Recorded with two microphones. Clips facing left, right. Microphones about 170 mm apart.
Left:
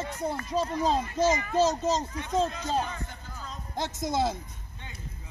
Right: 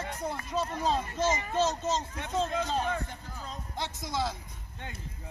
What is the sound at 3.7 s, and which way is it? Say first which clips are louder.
Speech: left 6 dB; 45° left (ahead or behind).